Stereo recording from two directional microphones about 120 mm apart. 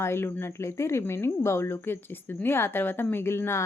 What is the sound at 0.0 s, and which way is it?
A woman's voice, 20° left (ahead or behind).